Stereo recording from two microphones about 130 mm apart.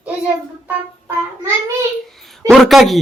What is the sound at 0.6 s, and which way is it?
Child singing, 15° right (ahead or behind).